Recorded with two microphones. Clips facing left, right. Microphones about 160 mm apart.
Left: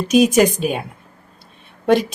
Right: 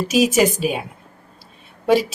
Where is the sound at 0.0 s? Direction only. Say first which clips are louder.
Left 3 dB; 5° right (ahead or behind).